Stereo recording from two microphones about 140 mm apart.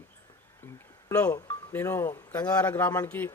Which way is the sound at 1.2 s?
20° left (ahead or behind).